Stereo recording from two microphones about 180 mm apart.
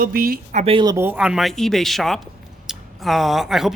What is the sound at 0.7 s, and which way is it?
Speech, 20° right (ahead or behind).